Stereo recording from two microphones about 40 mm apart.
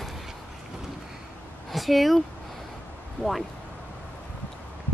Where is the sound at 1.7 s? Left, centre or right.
Centre.